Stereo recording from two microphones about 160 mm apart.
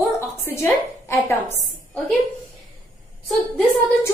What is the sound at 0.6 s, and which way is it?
Speech, 15° left (ahead or behind).